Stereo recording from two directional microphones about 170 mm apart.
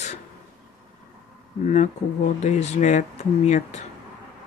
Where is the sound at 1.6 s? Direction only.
40° left (ahead or behind).